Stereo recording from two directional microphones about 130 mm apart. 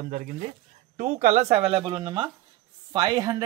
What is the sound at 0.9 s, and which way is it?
Speech, 70° right (ahead or behind).